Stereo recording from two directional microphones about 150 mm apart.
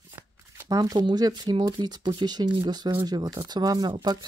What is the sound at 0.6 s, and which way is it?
Speech, 25° right (ahead or behind).